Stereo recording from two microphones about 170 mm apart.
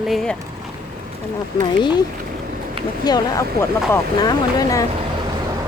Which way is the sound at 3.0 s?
25° left (ahead or behind).